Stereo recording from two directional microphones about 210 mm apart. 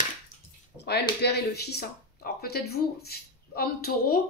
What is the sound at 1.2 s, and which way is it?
Speech, 50° left (ahead or behind).